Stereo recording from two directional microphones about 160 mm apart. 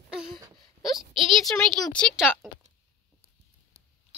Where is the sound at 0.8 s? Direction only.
Centre (ahead or behind).